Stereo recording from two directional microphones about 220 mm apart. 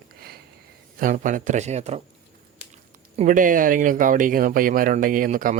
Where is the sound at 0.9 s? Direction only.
40° right (ahead or behind).